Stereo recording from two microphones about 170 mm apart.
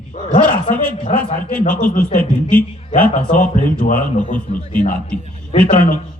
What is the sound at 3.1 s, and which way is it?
Speech, 50° left (ahead or behind).